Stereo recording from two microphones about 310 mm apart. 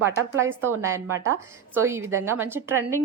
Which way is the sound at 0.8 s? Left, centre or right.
Centre.